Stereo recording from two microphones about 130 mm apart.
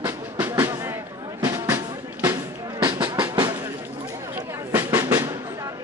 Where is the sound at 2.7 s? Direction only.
40° right (ahead or behind).